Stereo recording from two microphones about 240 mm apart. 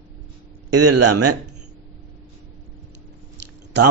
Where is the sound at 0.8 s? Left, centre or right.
Right.